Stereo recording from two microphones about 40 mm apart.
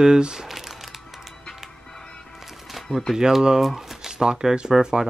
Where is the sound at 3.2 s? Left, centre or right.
Centre.